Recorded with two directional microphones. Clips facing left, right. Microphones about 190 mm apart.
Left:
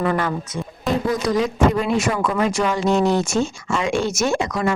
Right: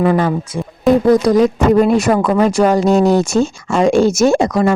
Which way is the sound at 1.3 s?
40° right (ahead or behind).